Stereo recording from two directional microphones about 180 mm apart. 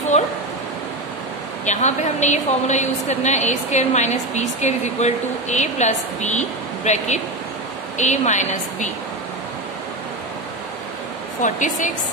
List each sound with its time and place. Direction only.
1.7 s a woman's voice: 40° left (ahead or behind)
11.4 s a woman's voice: 45° left (ahead or behind)